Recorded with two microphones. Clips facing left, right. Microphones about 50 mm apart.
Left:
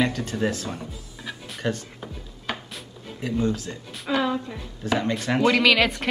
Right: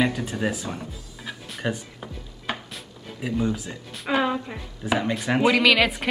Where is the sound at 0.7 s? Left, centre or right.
Centre.